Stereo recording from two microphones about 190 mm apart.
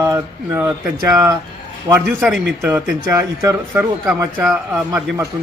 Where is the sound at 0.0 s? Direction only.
15° right (ahead or behind).